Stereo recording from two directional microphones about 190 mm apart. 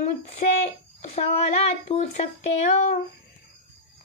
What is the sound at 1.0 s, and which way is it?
Speech, 35° left (ahead or behind).